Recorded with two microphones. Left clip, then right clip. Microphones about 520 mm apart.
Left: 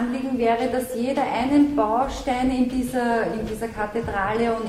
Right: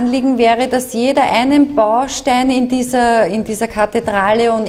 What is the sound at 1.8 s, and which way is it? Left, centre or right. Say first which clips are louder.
Speech: right 9 dB; right.